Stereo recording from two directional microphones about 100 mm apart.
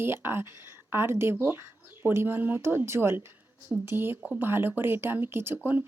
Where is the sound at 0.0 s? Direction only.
25° right (ahead or behind).